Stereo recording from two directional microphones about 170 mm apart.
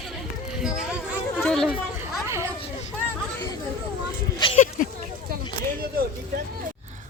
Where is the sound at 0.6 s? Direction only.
5° right (ahead or behind).